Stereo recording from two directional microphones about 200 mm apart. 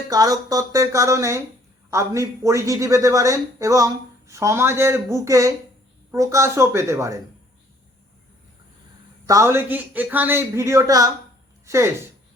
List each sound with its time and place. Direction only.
0.1 s a woman's voice: 20° right (ahead or behind)
9.2 s a woman's voice: 15° right (ahead or behind)